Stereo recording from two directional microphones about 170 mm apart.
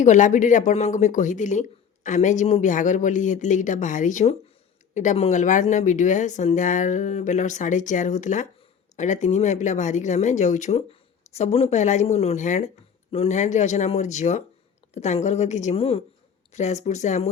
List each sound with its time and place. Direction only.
0.0 s a woman's voice: 45° left (ahead or behind)